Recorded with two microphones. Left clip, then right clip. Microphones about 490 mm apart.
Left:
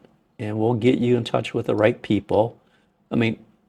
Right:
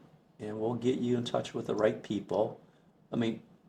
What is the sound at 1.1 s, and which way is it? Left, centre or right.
Speech, left.